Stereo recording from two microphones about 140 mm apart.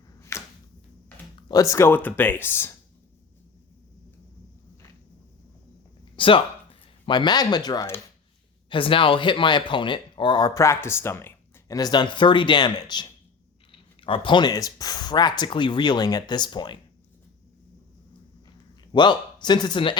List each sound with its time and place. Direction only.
0.2 s a sound: 20° left (ahead or behind)
1.5 s speech: 25° left (ahead or behind)
6.1 s speech: 40° left (ahead or behind)
18.9 s speech: 30° left (ahead or behind)